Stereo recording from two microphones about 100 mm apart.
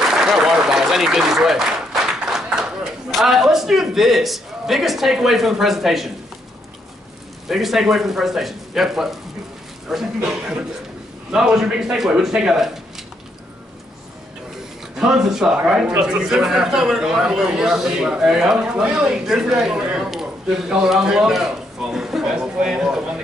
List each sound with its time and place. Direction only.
0.0 s speech: 5° right (ahead or behind)
7.4 s speech: 5° right (ahead or behind)
15.0 s a man's voice: 5° right (ahead or behind)